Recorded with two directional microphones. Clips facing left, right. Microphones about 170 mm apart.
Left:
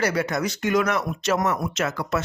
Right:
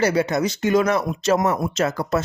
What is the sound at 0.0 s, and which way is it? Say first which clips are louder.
Speech: right 4 dB; 25° right (ahead or behind).